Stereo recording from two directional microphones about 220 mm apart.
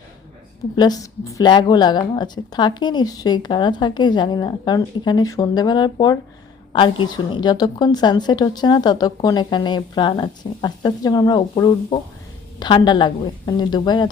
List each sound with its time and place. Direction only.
0.8 s a woman's voice: 15° left (ahead or behind)